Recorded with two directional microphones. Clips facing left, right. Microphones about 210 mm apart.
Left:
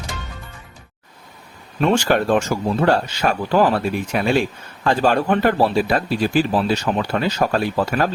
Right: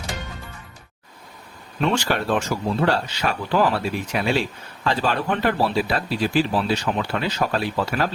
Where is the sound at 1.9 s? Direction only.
50° left (ahead or behind).